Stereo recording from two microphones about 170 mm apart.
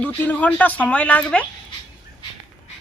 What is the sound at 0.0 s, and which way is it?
A woman's voice, 10° left (ahead or behind).